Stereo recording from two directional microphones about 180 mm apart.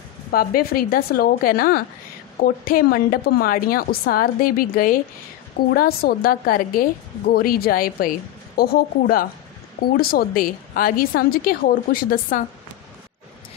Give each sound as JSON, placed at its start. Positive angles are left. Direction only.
{"t": 0.3, "sound": "a woman's voice", "side_deg": 55}